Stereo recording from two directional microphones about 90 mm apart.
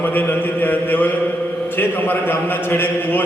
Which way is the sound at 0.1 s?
20° left (ahead or behind).